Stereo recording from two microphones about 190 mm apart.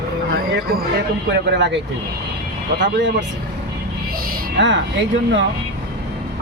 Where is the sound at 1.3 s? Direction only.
65° right (ahead or behind).